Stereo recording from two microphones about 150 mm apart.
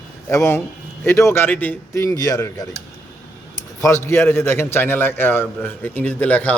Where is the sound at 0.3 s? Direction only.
15° left (ahead or behind).